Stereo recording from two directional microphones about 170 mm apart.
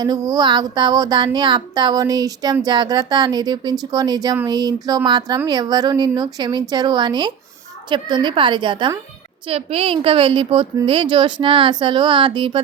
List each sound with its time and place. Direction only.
0.0 s a woman's voice: 25° right (ahead or behind)